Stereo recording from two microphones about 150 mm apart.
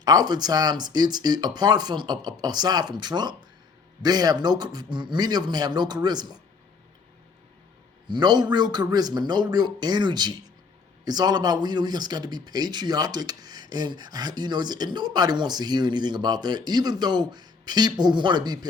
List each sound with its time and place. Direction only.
0.0 s speech: 25° right (ahead or behind)
8.0 s speech: 30° right (ahead or behind)